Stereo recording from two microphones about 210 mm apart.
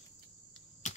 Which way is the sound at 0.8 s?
35° left (ahead or behind).